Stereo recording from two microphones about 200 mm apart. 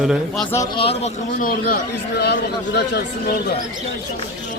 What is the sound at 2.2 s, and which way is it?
Speech, 55° left (ahead or behind).